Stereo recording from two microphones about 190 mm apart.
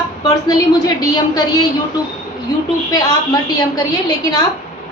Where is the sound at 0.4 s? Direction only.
20° left (ahead or behind).